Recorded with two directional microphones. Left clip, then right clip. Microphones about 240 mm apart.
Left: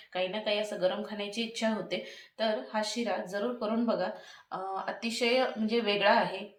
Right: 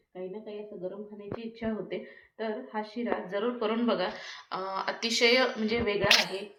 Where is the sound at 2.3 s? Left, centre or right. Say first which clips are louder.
Left 4 dB; left.